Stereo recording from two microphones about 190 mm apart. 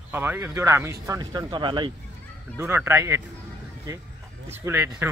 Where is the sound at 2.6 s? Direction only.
15° right (ahead or behind).